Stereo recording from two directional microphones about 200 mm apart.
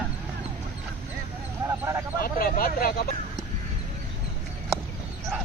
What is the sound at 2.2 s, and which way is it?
Speech, 45° left (ahead or behind).